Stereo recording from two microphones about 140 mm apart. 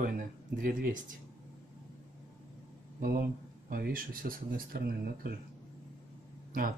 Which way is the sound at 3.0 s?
90° right.